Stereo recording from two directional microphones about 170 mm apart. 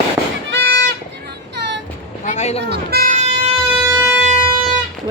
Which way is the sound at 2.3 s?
40° left (ahead or behind).